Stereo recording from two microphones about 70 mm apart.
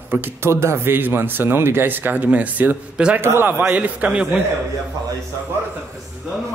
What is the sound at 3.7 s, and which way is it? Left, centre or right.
Speech, right.